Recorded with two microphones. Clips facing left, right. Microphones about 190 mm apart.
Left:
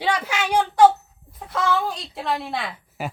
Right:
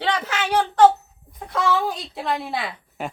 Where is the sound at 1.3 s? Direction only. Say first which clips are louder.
Right 1 dB; centre (ahead or behind).